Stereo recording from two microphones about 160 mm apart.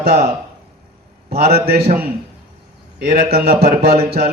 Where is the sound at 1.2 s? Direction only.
75° right (ahead or behind).